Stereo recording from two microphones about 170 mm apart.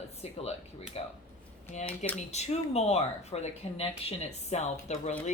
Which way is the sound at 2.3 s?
40° left (ahead or behind).